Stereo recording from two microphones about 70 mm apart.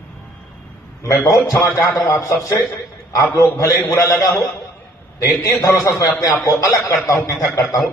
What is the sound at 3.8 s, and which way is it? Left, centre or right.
Speech, left.